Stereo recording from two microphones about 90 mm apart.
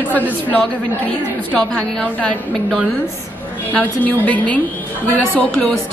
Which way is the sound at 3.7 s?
20° left (ahead or behind).